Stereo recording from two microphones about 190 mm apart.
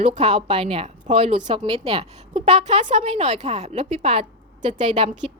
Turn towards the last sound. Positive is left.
turn(degrees=-30)  # may be behind; listen again after turning